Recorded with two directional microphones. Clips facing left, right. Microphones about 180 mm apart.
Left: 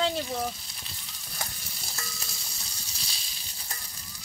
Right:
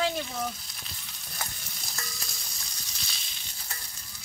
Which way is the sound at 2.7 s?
35° left (ahead or behind).